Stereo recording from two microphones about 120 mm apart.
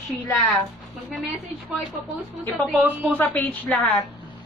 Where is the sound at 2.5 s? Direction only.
15° right (ahead or behind).